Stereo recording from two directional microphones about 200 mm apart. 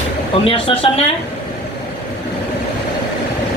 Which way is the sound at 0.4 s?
25° left (ahead or behind).